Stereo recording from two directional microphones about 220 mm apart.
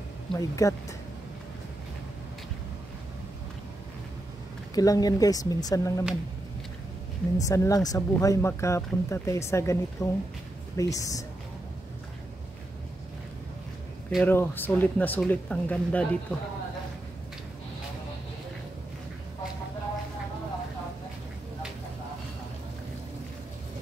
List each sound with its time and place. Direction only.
0.3 s speech: 15° left (ahead or behind)
4.7 s speech: 15° left (ahead or behind)
7.3 s speech: 15° left (ahead or behind)
14.1 s speech: 10° left (ahead or behind)